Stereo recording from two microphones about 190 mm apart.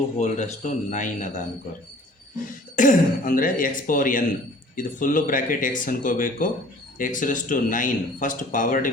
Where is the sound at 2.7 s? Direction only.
45° left (ahead or behind).